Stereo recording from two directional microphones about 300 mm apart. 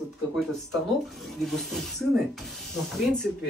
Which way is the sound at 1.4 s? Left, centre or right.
Centre.